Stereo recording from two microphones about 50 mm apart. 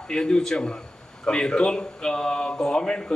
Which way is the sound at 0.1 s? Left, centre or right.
Centre.